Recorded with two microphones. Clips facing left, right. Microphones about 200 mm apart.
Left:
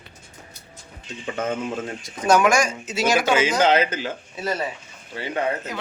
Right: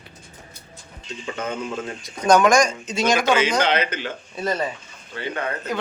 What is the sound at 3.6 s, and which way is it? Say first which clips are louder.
Speech: left 3 dB; 40° left (ahead or behind).